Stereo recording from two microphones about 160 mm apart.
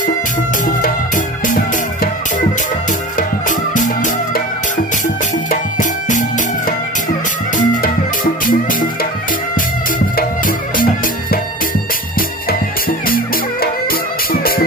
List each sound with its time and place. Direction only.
0.8 s music: 55° left (ahead or behind)
3.2 s music: 55° left (ahead or behind)
7.5 s music: 55° left (ahead or behind)
10.1 s music: 65° left (ahead or behind)